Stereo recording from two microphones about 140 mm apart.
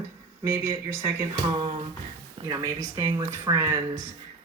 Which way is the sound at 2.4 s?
20° right (ahead or behind).